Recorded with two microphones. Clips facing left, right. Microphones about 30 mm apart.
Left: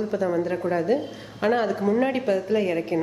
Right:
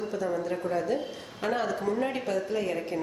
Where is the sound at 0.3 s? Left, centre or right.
Left.